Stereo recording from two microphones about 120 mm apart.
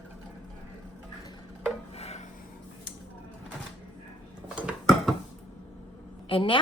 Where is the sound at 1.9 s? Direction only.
60° left (ahead or behind).